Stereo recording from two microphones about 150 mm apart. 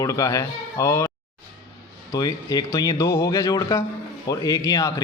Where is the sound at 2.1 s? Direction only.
25° left (ahead or behind).